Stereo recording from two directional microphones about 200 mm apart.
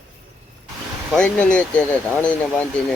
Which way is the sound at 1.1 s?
5° left (ahead or behind).